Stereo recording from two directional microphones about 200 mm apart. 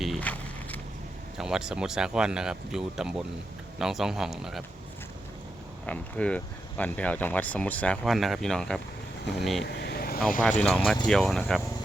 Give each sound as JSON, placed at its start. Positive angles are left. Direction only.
{"t": 0.0, "sound": "vehicle", "side_deg": 5}
{"t": 1.4, "sound": "speech", "side_deg": 0}
{"t": 5.8, "sound": "speech", "side_deg": 5}
{"t": 9.6, "sound": "vehicle", "side_deg": 55}
{"t": 10.6, "sound": "speech", "side_deg": 5}